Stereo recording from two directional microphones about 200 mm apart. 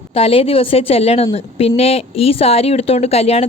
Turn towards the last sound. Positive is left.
turn(degrees=30)  # may be behind; listen again after turning